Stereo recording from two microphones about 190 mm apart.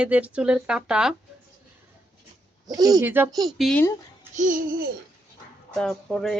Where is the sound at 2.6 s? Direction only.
20° right (ahead or behind).